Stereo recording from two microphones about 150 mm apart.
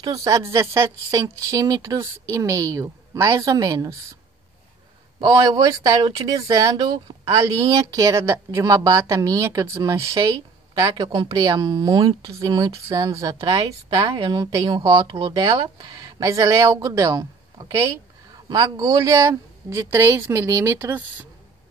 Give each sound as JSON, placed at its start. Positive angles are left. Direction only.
{"t": 0.0, "sound": "speech", "side_deg": -25}
{"t": 5.2, "sound": "speech", "side_deg": -25}